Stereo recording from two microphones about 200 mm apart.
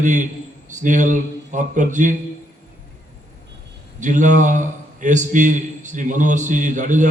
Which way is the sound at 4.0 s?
40° right (ahead or behind).